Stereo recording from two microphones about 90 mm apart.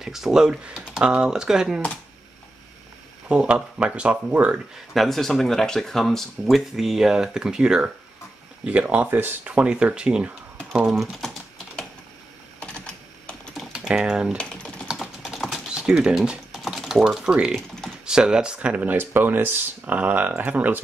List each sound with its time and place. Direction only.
0.0 s speech: 5° right (ahead or behind)
3.3 s speech: 10° right (ahead or behind)
4.9 s speech: 5° left (ahead or behind)
12.5 s typing: 15° left (ahead or behind)
13.7 s speech: 10° right (ahead or behind)
14.3 s typing: 10° left (ahead or behind)
15.2 s typing: 5° right (ahead or behind)
17.6 s typing: 5° left (ahead or behind)
18.0 s speech: 10° right (ahead or behind)